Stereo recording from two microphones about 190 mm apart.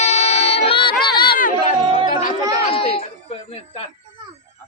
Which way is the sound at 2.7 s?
30° left (ahead or behind).